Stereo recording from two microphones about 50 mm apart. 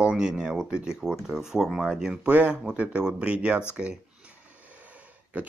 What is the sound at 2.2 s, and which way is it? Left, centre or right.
Speech, right.